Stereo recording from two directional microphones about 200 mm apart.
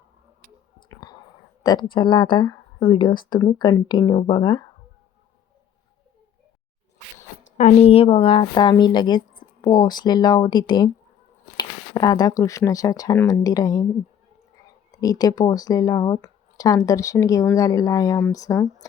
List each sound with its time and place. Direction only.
0.9 s a sound: 20° left (ahead or behind)
1.6 s a woman's voice: 20° left (ahead or behind)
7.5 s a woman's voice: 35° left (ahead or behind); by 13.8 s 20° left (ahead or behind)
14.9 s speech: 20° left (ahead or behind)